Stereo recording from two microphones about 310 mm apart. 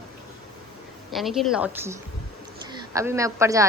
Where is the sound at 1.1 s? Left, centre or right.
Centre.